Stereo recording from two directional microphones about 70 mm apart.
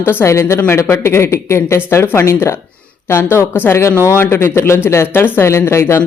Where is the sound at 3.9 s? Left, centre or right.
Right.